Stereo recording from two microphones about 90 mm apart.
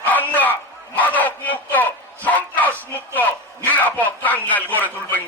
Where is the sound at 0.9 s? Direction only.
20° left (ahead or behind).